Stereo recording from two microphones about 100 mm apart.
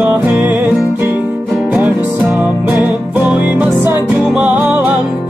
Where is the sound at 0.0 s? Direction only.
20° right (ahead or behind).